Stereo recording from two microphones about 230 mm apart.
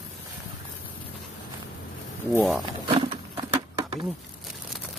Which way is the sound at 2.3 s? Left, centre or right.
Centre.